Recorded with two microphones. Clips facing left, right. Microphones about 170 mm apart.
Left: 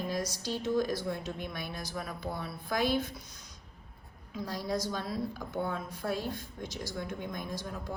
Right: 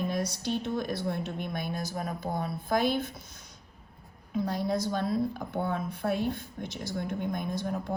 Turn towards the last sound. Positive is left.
turn(degrees=-60)  # may be behind; listen again after turning